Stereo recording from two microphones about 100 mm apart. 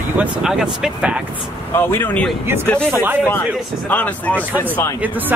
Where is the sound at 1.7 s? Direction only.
20° left (ahead or behind).